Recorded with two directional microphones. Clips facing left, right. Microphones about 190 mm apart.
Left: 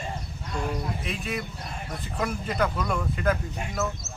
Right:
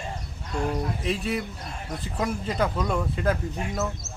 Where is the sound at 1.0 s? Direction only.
35° right (ahead or behind).